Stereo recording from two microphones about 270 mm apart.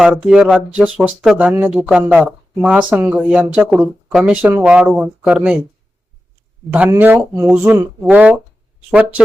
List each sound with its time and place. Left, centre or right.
0.0 s speech: centre
6.7 s speech: centre